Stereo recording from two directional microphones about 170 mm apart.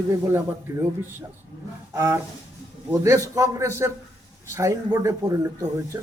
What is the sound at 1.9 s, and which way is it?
A man's voice, 15° right (ahead or behind).